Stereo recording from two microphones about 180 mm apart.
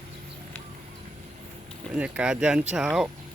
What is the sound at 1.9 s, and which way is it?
Speech, 5° right (ahead or behind).